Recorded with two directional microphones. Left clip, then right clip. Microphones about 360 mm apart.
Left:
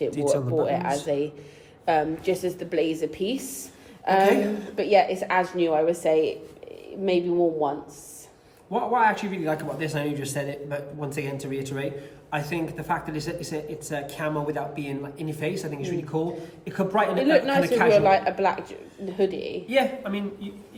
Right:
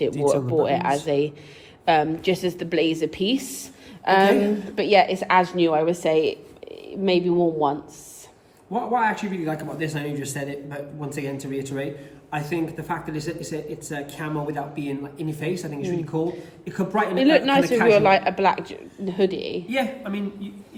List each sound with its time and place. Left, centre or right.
0.1 s speech: centre
0.6 s a woman's voice: right
8.7 s speech: centre
17.2 s a woman's voice: right
19.6 s speech: centre